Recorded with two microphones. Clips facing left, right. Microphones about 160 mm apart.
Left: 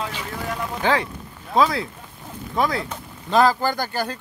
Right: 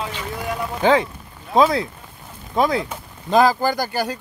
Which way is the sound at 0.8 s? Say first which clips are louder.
Right 6 dB; 20° right (ahead or behind).